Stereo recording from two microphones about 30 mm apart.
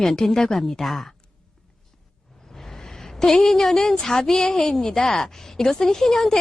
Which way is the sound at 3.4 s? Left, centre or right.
Centre.